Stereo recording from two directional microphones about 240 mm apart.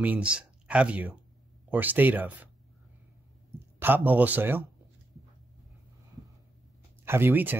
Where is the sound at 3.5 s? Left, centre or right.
Centre.